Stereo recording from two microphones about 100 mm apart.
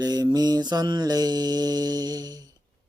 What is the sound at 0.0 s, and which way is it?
Mantra, 40° right (ahead or behind).